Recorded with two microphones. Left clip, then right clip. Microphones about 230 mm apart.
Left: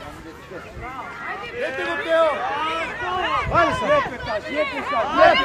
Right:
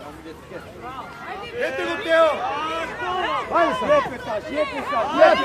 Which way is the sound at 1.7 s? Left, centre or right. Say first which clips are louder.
Left 1 dB; left.